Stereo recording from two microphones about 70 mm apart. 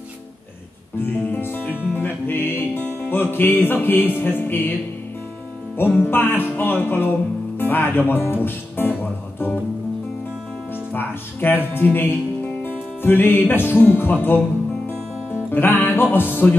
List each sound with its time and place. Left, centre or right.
1.1 s speech: left
2.0 s music: left
5.8 s speech: left
6.5 s music: left
10.9 s speech: left
12.6 s music: left
15.5 s speech: left